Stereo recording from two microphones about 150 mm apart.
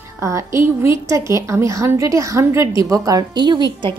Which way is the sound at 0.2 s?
20° right (ahead or behind).